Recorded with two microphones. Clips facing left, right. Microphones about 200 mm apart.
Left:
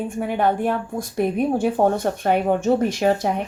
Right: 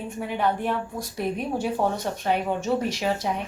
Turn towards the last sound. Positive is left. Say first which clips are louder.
# left 7 dB
turn(degrees=50)  # may be behind; listen again after turning